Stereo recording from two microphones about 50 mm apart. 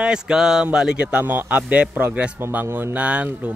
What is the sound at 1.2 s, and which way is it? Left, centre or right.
Speech, right.